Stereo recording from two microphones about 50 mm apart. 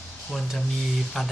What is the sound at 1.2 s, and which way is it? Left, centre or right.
Speech, centre.